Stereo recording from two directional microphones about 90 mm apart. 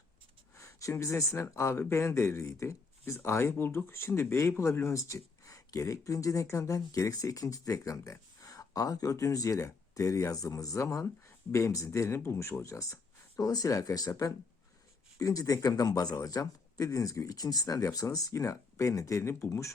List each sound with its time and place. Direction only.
0.5 s speech: 35° left (ahead or behind)